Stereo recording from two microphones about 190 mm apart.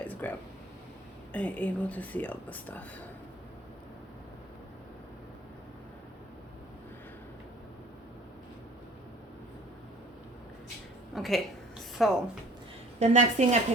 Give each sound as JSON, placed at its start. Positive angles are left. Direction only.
{"t": 0.0, "sound": "a sound", "side_deg": 10}
{"t": 1.3, "sound": "speech", "side_deg": 10}
{"t": 11.1, "sound": "a woman's voice", "side_deg": 0}
{"t": 13.0, "sound": "a woman's voice", "side_deg": -35}